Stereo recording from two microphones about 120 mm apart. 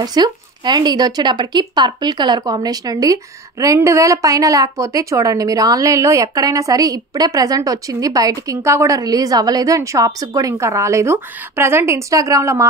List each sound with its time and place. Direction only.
0.0 s speech: 35° right (ahead or behind)